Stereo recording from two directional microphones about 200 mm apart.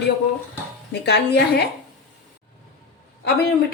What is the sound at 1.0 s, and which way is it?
Speech, 55° left (ahead or behind).